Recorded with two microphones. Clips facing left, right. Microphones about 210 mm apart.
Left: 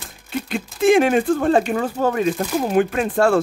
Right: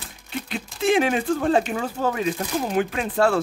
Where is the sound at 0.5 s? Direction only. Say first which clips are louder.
Left 6 dB; 50° left (ahead or behind).